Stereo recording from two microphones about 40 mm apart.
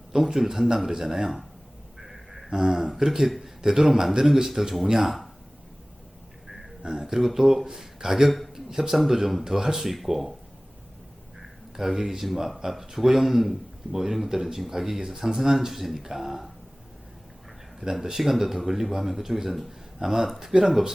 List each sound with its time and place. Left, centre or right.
0.1 s speech: centre
2.0 s a sound: centre
3.0 s a man's voice: centre
3.6 s speech: centre
6.8 s speech: right
7.2 s speech: centre
11.8 s speech: centre
18.0 s speech: centre